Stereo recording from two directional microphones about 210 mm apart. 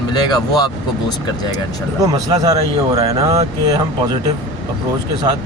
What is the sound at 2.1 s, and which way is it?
Speech, 15° right (ahead or behind).